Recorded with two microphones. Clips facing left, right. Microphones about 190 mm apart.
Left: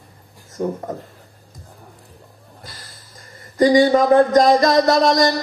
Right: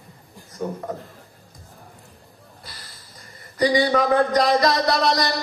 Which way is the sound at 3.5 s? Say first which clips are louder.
Left 6 dB; 45° left (ahead or behind).